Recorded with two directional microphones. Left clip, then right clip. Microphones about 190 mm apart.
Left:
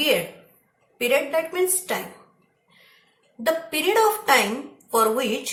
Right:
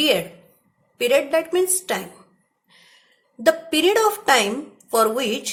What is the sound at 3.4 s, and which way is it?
A woman's voice, 55° right (ahead or behind).